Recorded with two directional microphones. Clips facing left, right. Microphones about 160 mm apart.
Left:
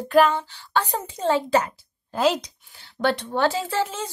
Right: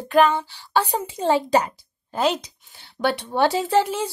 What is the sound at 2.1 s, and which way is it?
Speech, centre (ahead or behind).